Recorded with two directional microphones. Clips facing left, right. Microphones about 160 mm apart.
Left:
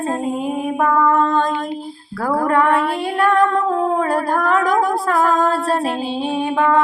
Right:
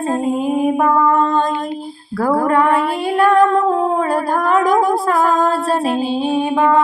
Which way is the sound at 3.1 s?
35° right (ahead or behind).